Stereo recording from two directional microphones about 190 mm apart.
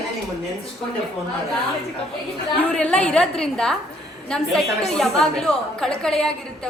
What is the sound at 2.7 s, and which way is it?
A woman's voice, 5° left (ahead or behind).